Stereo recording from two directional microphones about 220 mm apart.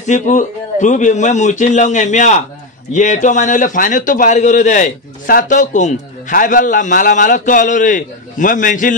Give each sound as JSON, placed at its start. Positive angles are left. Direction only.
{"t": 0.0, "sound": "a man's voice", "side_deg": 35}